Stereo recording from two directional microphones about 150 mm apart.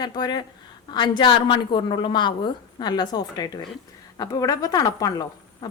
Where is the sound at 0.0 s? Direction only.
30° left (ahead or behind).